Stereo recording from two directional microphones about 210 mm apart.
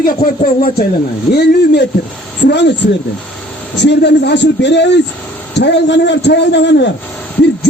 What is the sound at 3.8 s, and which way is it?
A man's voice, 55° left (ahead or behind).